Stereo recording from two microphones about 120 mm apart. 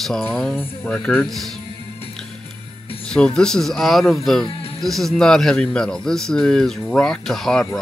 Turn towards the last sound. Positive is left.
turn(degrees=5)  # may be behind; listen again after turning